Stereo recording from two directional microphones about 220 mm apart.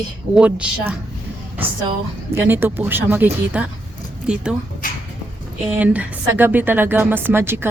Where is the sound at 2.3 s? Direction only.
10° right (ahead or behind).